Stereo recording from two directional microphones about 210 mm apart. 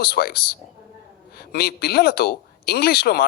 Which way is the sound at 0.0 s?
45° left (ahead or behind).